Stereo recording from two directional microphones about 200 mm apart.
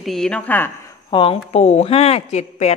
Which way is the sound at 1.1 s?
25° left (ahead or behind).